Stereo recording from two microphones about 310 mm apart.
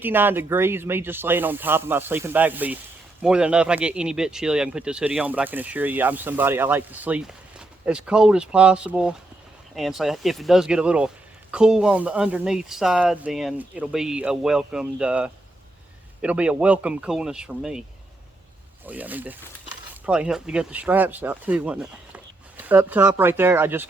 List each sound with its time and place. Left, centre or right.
0.0 s speech: centre
18.9 s speech: centre